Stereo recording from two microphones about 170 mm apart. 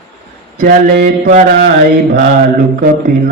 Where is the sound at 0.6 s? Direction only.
55° right (ahead or behind).